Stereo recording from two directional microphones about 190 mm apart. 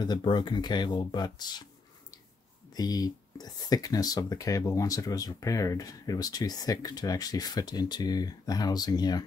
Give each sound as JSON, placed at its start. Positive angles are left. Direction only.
{"t": 0.0, "sound": "speech", "side_deg": 25}